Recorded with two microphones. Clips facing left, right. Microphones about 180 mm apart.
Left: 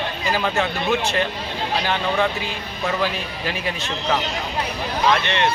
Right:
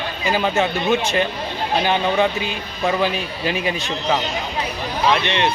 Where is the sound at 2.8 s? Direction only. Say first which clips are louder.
Right 4 dB; 15° right (ahead or behind).